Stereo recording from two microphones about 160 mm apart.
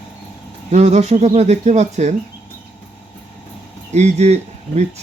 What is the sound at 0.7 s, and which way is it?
Speech, 45° right (ahead or behind).